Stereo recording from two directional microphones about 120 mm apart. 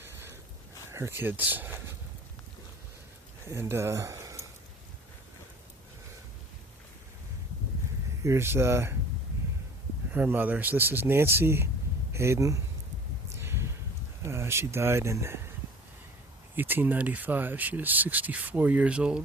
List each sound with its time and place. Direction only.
0.0 s a sound: 20° right (ahead or behind)
0.9 s speech: 20° right (ahead or behind)
3.4 s speech: 20° right (ahead or behind)
8.2 s speech: 20° right (ahead or behind)
10.1 s speech: 15° right (ahead or behind)
13.4 s a sound: 20° right (ahead or behind)
14.3 s speech: 20° right (ahead or behind)
16.6 s speech: 15° right (ahead or behind)